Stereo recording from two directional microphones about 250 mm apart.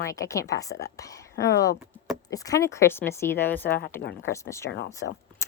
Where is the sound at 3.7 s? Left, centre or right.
Left.